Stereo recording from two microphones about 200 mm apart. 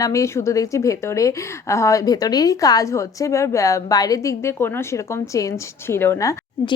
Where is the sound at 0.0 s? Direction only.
15° left (ahead or behind).